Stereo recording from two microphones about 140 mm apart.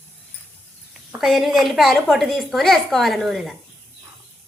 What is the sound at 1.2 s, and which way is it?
A woman's voice, centre (ahead or behind).